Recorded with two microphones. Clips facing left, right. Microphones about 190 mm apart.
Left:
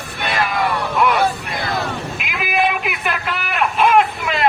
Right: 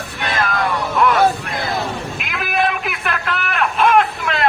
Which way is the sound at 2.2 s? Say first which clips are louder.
Left 1 dB; centre (ahead or behind).